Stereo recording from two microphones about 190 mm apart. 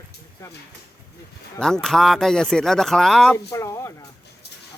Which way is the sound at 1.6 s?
Centre (ahead or behind).